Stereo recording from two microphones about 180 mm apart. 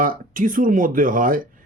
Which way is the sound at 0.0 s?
50° right (ahead or behind).